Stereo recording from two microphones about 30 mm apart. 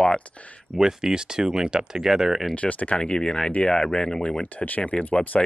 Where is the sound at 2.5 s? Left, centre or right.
Left.